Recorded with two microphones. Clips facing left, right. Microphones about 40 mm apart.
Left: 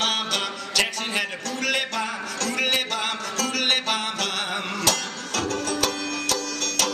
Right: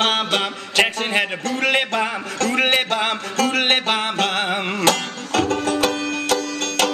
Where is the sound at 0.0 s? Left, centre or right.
Right.